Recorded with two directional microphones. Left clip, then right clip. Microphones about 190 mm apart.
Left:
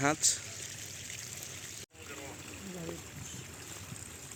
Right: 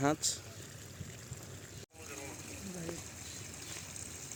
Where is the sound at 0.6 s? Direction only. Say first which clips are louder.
Left 7 dB; 45° right (ahead or behind).